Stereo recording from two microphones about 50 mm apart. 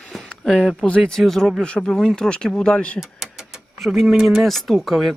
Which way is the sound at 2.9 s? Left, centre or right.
Centre.